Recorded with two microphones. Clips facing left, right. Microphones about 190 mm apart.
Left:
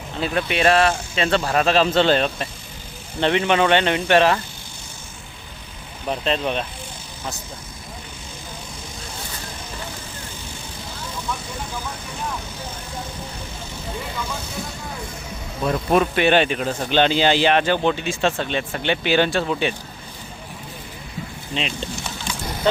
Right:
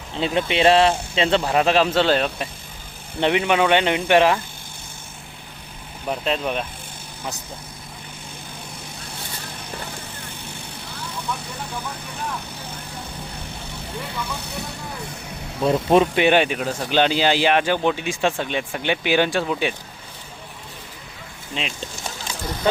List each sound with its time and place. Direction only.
0.2 s speech: 25° right (ahead or behind)
6.1 s speech: 5° right (ahead or behind)
14.4 s speech: 65° right (ahead or behind)
15.6 s speech: 25° right (ahead or behind); by 19.7 s 10° right (ahead or behind)
21.5 s speech: 5° right (ahead or behind)
22.0 s a sound: 40° right (ahead or behind)